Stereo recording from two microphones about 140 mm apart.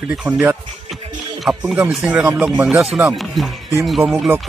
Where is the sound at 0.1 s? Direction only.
5° right (ahead or behind).